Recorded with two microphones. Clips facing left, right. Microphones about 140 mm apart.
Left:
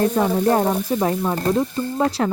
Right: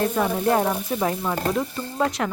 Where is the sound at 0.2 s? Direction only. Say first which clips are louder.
Left 3 dB; 30° left (ahead or behind).